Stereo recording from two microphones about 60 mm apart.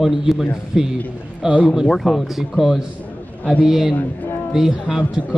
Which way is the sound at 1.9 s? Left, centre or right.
Centre.